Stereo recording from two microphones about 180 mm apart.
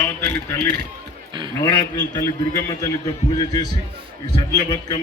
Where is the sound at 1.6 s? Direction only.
20° left (ahead or behind).